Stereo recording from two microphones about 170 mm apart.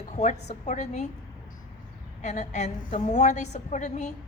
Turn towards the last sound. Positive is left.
turn(degrees=45)  # may be behind; listen again after turning